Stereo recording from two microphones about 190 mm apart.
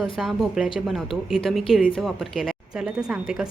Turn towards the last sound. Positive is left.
turn(degrees=-5)  # may be behind; listen again after turning